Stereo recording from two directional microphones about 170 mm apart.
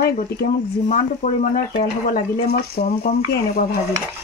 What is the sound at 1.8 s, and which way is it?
Speech, 60° left (ahead or behind).